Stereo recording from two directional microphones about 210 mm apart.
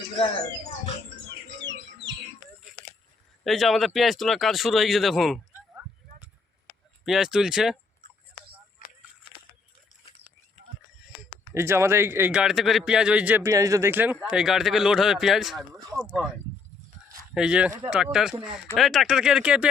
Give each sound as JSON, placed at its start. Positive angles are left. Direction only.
{"t": 3.4, "sound": "speech", "side_deg": 0}
{"t": 7.0, "sound": "speech", "side_deg": 0}
{"t": 8.8, "sound": "a sound", "side_deg": 40}
{"t": 11.2, "sound": "a man's voice", "side_deg": -10}
{"t": 17.3, "sound": "speech", "side_deg": -5}